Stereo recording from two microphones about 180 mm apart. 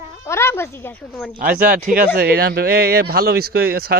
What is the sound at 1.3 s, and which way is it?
Speech, 50° right (ahead or behind).